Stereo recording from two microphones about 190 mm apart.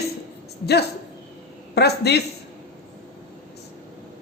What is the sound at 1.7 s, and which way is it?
Speech, 60° left (ahead or behind).